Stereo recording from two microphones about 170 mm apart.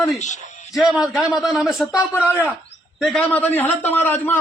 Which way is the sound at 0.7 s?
5° right (ahead or behind).